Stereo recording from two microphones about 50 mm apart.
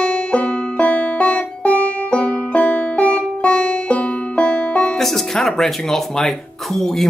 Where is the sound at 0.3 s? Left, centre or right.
Left.